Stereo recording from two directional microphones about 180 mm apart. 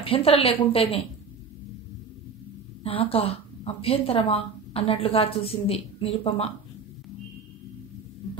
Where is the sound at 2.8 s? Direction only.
30° left (ahead or behind).